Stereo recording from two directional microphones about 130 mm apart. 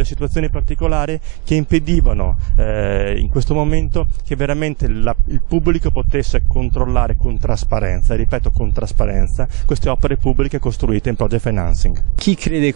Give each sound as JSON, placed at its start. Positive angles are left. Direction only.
{"t": 0.0, "sound": "speech", "side_deg": -15}